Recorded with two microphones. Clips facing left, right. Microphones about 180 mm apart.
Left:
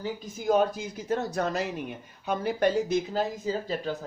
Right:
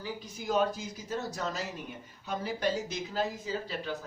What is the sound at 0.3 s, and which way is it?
Speech, 50° left (ahead or behind).